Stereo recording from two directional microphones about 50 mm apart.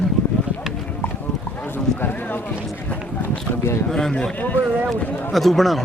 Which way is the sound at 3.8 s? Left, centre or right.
Centre.